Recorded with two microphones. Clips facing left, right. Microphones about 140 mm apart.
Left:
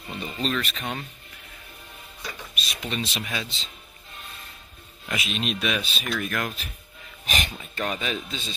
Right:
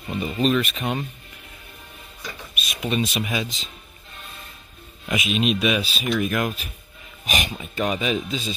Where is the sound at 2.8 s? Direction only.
15° right (ahead or behind).